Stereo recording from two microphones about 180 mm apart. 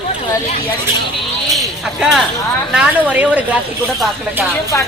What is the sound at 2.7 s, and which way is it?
Speech, 10° right (ahead or behind).